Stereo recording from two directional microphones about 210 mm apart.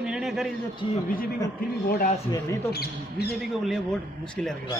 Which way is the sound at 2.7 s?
50° left (ahead or behind).